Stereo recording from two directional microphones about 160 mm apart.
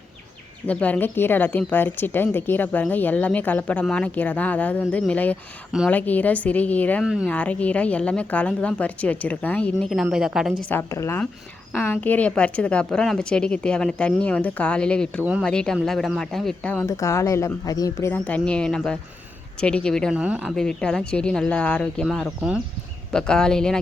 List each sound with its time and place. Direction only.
0.7 s speech: 10° left (ahead or behind)
7.0 s speech: 5° right (ahead or behind)
7.3 s speech: 10° left (ahead or behind)
10.7 s speech: 15° left (ahead or behind)
15.2 s speech: 10° right (ahead or behind)
15.4 s speech: 5° left (ahead or behind)
16.8 s speech: 20° left (ahead or behind)